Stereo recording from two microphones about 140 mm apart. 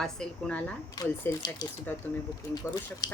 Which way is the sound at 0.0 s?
5° left (ahead or behind).